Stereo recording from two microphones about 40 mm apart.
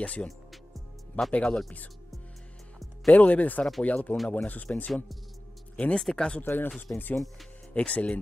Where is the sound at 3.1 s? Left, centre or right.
Left.